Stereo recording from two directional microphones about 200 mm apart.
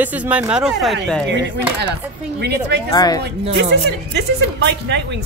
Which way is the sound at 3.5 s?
60° right (ahead or behind).